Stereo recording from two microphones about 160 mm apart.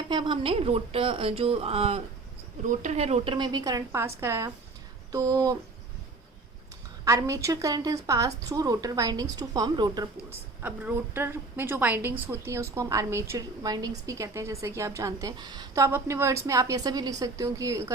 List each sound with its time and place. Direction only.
0.1 s a woman's voice: 30° right (ahead or behind)
3.3 s a woman's voice: 25° right (ahead or behind)
7.0 s a woman's voice: 20° right (ahead or behind)
10.6 s a woman's voice: 10° right (ahead or behind)